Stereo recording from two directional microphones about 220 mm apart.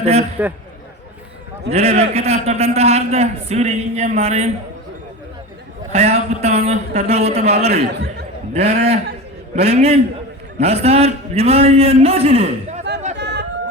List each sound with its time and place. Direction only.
0.0 s a man's voice: 30° right (ahead or behind)
1.7 s a man's voice: 30° right (ahead or behind)
5.9 s a man's voice: 30° right (ahead or behind)
13.1 s chatter: 50° right (ahead or behind)